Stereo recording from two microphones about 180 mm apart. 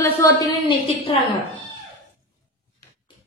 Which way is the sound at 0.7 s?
30° left (ahead or behind).